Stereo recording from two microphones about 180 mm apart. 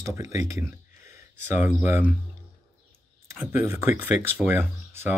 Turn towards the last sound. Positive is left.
turn(degrees=-15)  # may be behind; listen again after turning